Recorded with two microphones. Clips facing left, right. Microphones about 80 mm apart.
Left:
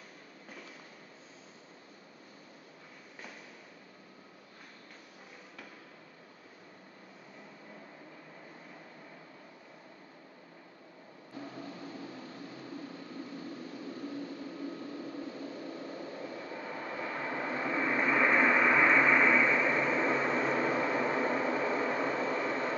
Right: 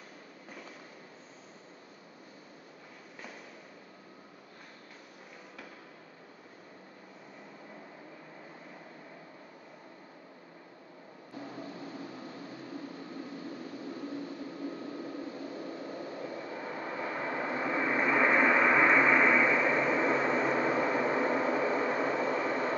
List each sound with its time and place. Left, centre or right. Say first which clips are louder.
11.3 s vehicle: right 1 dB; right